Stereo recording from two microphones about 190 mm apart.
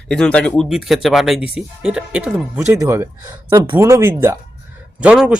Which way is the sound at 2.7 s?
15° right (ahead or behind).